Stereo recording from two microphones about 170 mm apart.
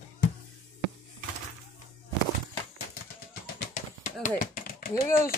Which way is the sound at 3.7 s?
50° left (ahead or behind).